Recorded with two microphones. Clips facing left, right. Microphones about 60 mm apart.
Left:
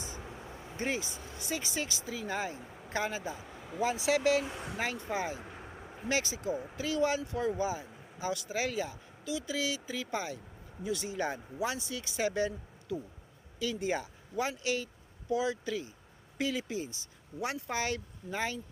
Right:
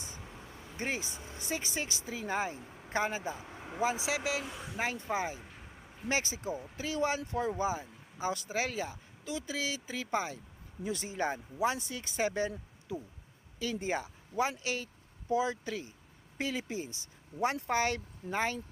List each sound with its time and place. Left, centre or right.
0.8 s speech: right
3.8 s speech: centre
4.2 s speech: centre
4.8 s speech: right
5.4 s a sound: centre
6.1 s speech: right